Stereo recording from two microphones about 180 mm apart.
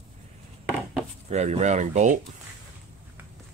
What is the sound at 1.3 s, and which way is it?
Speech, 40° right (ahead or behind).